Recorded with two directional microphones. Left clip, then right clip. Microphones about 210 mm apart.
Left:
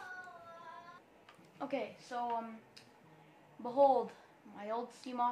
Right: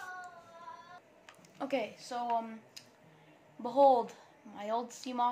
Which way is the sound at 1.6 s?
45° right (ahead or behind).